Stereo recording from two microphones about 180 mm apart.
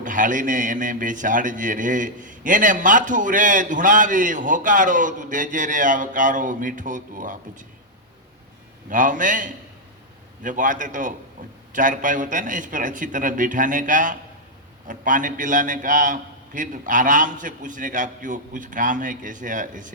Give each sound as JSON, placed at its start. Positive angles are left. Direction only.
{"t": 0.0, "sound": "a man's voice", "side_deg": -45}
{"t": 8.9, "sound": "a man's voice", "side_deg": -45}